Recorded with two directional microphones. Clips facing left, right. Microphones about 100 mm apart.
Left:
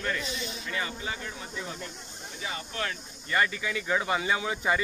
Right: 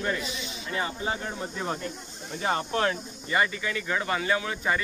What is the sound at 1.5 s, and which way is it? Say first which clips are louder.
Speech: right 6 dB; 50° right (ahead or behind).